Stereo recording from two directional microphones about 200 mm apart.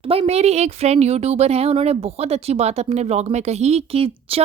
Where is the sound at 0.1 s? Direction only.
30° right (ahead or behind).